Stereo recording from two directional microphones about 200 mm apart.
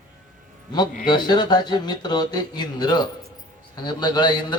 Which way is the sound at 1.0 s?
20° left (ahead or behind).